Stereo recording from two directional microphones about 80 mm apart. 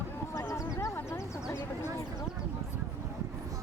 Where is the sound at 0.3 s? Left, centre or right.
Left.